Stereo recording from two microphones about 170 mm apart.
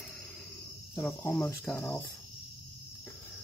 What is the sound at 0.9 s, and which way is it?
Speech, 5° left (ahead or behind).